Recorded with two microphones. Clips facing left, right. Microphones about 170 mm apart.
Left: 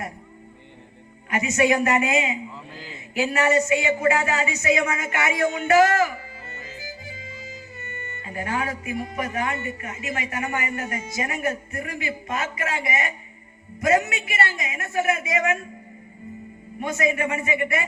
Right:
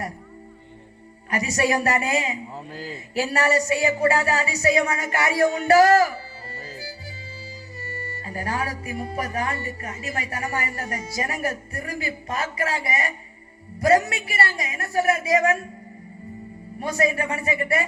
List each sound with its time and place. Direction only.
1.3 s a man's voice: 35° right (ahead or behind)
7.8 s music: 35° right (ahead or behind)
8.8 s a man's voice: 35° right (ahead or behind)
16.8 s a man's voice: 35° right (ahead or behind)